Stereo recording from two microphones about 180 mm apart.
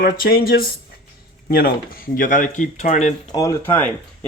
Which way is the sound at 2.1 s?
50° left (ahead or behind).